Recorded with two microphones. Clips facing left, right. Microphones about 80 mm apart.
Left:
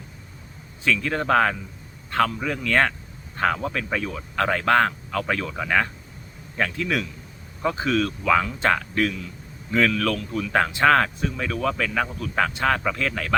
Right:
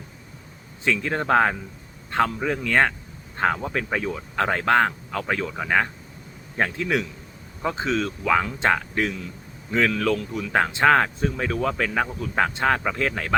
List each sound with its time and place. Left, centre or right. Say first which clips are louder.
0.9 s speech: even; right
11.2 s speech: right 1 dB; right